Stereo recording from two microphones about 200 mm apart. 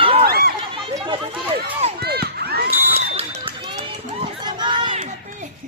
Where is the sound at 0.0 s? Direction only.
25° right (ahead or behind).